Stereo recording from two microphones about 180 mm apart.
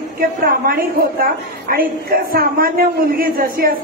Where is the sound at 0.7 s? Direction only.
55° right (ahead or behind).